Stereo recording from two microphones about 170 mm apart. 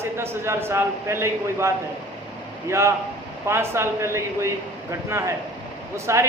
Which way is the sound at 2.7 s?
15° right (ahead or behind).